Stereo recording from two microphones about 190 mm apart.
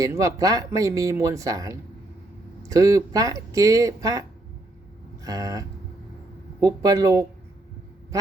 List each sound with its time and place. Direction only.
0.0 s speech: 15° right (ahead or behind)
5.2 s a sound: 20° right (ahead or behind)
6.6 s speech: 20° right (ahead or behind)